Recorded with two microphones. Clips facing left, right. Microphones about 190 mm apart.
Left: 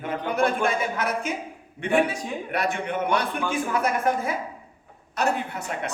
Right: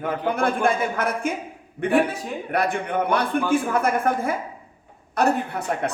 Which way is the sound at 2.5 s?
55° right (ahead or behind).